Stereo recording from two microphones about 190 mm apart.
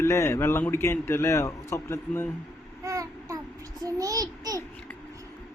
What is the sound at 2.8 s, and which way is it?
Child singing, 15° right (ahead or behind).